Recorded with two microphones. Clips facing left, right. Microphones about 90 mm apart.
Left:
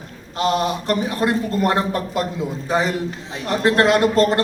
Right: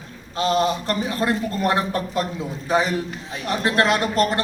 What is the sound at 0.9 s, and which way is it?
Speech, 25° left (ahead or behind).